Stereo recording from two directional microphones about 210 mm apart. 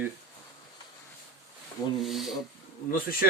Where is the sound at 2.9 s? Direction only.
45° left (ahead or behind).